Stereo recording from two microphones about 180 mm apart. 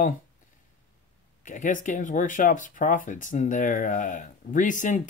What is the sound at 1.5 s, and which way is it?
Speech, 45° left (ahead or behind).